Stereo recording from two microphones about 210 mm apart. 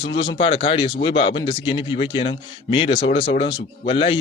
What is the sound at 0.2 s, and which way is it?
A man's voice, 25° left (ahead or behind).